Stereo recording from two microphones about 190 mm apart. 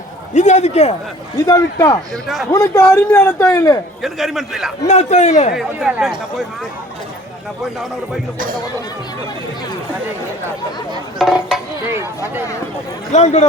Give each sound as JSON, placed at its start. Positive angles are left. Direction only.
{"t": 0.3, "sound": "a man's voice", "side_deg": 35}
{"t": 1.5, "sound": "a man's voice", "side_deg": 15}
{"t": 2.2, "sound": "a man's voice", "side_deg": 0}
{"t": 2.5, "sound": "a man's voice", "side_deg": 15}
{"t": 4.0, "sound": "a man's voice", "side_deg": 0}
{"t": 4.9, "sound": "a man's voice", "side_deg": 35}
{"t": 5.5, "sound": "a man's voice", "side_deg": 0}
{"t": 11.2, "sound": "a man's voice", "side_deg": 0}
{"t": 13.1, "sound": "a man's voice", "side_deg": 35}